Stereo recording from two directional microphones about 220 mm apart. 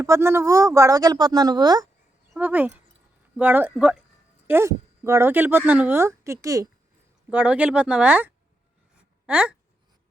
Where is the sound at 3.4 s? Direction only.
10° right (ahead or behind).